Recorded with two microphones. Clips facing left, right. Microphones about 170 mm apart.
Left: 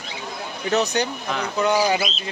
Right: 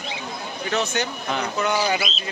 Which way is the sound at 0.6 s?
35° left (ahead or behind).